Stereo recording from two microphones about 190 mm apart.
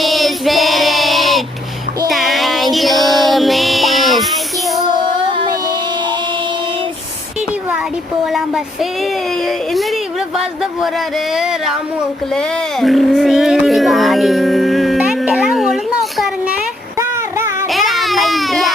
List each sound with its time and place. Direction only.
0.0 s child singing: centre (ahead or behind)
2.0 s music: centre (ahead or behind)
3.0 s child singing: centre (ahead or behind)
5.3 s music: 25° right (ahead or behind)
8.2 s a sound: centre (ahead or behind)
9.5 s speech: centre (ahead or behind)
16.1 s a sound: centre (ahead or behind)
17.0 s female singing: 15° right (ahead or behind)
17.7 s a sound: centre (ahead or behind)